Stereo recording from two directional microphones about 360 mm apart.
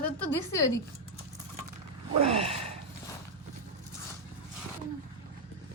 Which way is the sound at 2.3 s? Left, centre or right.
Centre.